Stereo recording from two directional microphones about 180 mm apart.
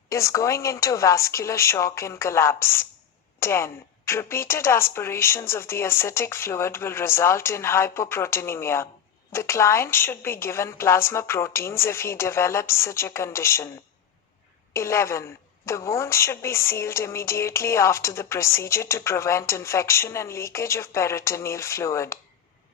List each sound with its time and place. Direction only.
0.1 s speech: 15° left (ahead or behind)
14.7 s speech: 15° left (ahead or behind)